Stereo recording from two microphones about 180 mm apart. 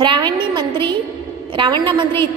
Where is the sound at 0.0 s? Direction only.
25° right (ahead or behind).